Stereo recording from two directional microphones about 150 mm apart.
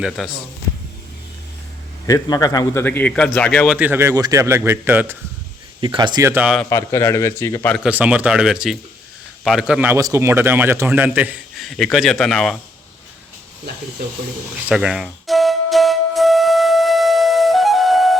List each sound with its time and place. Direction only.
0.2 s speech: centre (ahead or behind)
2.0 s a man's voice: 25° left (ahead or behind)
2.8 s a man's voice: 10° left (ahead or behind)
3.8 s a man's voice: 15° right (ahead or behind)
5.8 s speech: 30° right (ahead or behind)
6.7 s a man's voice: 20° left (ahead or behind)
7.9 s a man's voice: 10° right (ahead or behind)
14.7 s music: 5° right (ahead or behind)